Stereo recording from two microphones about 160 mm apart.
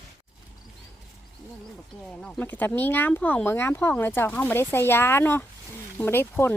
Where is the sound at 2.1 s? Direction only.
10° left (ahead or behind).